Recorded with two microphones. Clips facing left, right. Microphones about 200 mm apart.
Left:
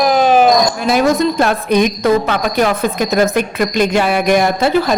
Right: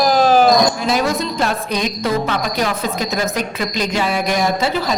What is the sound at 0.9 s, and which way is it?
A woman's voice, 55° left (ahead or behind).